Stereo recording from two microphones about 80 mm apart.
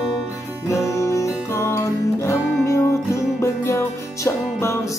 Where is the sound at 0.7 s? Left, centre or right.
Left.